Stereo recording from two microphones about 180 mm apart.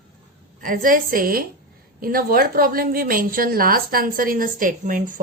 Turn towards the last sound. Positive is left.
turn(degrees=-45)  # may be behind; listen again after turning